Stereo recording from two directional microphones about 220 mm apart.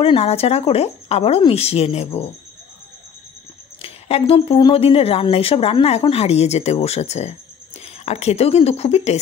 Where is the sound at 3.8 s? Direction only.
25° left (ahead or behind).